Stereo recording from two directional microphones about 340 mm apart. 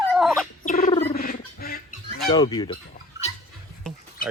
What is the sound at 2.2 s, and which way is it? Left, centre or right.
Fowl, centre.